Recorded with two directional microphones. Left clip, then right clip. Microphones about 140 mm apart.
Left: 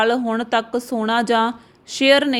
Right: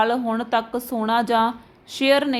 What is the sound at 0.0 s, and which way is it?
A woman's voice, 35° left (ahead or behind).